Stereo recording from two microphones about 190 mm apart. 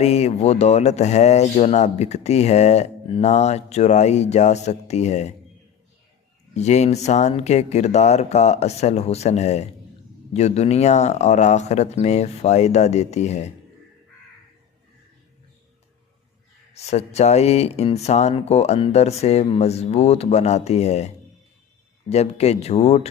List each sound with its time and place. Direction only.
0.0 s speech: 35° left (ahead or behind)
6.5 s speech: 35° left (ahead or behind)
16.7 s speech: 35° left (ahead or behind)
22.1 s speech: 35° left (ahead or behind)